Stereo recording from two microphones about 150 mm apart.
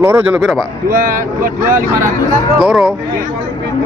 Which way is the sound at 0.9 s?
65° right (ahead or behind).